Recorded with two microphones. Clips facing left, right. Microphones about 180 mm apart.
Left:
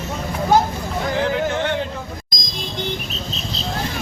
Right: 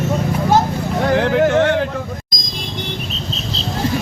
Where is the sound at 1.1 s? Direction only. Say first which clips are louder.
Right 7 dB; 65° right (ahead or behind).